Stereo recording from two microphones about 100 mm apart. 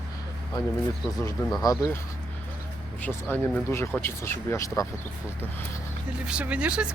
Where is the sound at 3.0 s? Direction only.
20° left (ahead or behind).